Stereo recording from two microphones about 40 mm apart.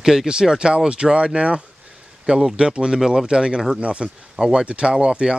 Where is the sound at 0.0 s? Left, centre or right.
Centre.